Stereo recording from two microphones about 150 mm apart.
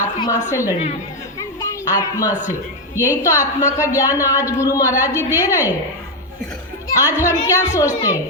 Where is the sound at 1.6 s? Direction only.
25° left (ahead or behind).